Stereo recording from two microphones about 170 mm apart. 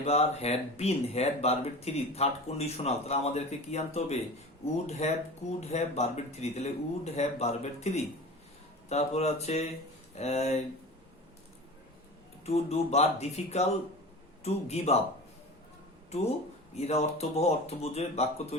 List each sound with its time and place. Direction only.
0.0 s speech: 35° left (ahead or behind)
12.5 s speech: 40° left (ahead or behind)
16.7 s speech: 40° left (ahead or behind)